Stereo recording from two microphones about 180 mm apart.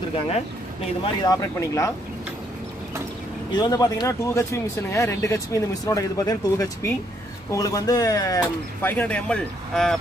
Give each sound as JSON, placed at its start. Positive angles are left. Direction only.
{"t": 1.2, "sound": "speech", "side_deg": 20}
{"t": 3.5, "sound": "speech", "side_deg": 20}
{"t": 8.8, "sound": "speech", "side_deg": 10}